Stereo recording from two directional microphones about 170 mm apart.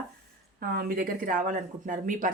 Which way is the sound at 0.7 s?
65° right (ahead or behind).